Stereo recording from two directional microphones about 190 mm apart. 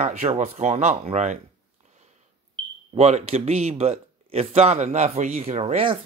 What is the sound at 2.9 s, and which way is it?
A man's voice, 35° right (ahead or behind).